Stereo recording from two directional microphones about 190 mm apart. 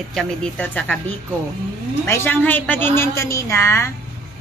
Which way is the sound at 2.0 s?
10° left (ahead or behind).